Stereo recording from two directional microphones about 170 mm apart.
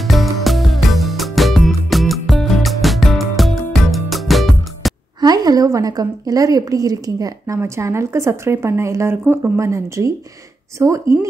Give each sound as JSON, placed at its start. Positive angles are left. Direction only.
{"t": 0.0, "sound": "music", "side_deg": 0}
{"t": 5.2, "sound": "a woman's voice", "side_deg": -25}